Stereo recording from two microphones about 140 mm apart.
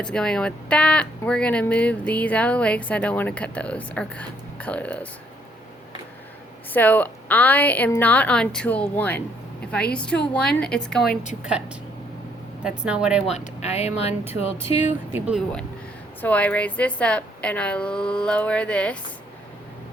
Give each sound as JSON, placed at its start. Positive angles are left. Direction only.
{"t": 0.0, "sound": "speech", "side_deg": 5}
{"t": 6.7, "sound": "speech", "side_deg": 10}
{"t": 12.6, "sound": "speech", "side_deg": -5}
{"t": 13.3, "sound": "speech", "side_deg": 50}
{"t": 14.8, "sound": "speech", "side_deg": -15}
{"t": 16.2, "sound": "speech", "side_deg": 10}